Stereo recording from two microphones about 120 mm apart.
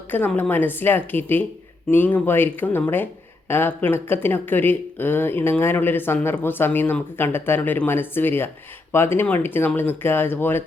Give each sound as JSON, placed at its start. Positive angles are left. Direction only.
{"t": 0.3, "sound": "speech", "side_deg": 15}